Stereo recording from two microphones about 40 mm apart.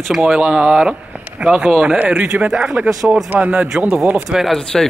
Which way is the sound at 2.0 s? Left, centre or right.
Right.